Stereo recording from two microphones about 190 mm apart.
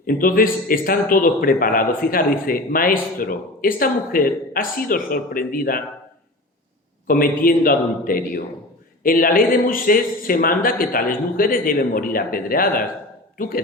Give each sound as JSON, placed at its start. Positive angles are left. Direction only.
{"t": 0.0, "sound": "speech", "side_deg": 50}
{"t": 7.1, "sound": "a man's voice", "side_deg": 50}